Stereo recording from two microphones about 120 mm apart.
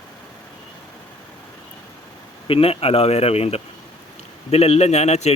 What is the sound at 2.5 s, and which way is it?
A man's voice, 50° left (ahead or behind).